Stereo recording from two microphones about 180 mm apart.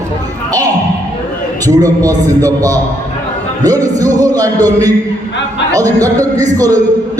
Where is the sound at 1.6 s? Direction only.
20° right (ahead or behind).